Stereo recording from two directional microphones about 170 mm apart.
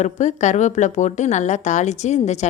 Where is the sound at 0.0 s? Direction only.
45° left (ahead or behind).